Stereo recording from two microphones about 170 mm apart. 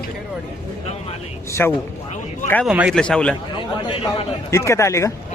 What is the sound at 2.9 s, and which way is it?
Speech, 5° left (ahead or behind).